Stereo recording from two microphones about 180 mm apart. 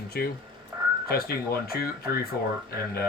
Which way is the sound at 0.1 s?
60° left (ahead or behind).